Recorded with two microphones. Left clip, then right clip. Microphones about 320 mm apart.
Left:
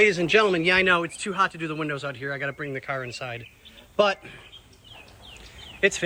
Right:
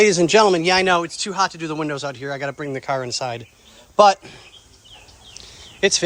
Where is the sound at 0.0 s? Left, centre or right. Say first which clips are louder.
Right 5 dB; centre.